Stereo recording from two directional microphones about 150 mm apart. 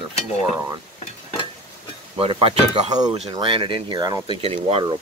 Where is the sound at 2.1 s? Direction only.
40° right (ahead or behind).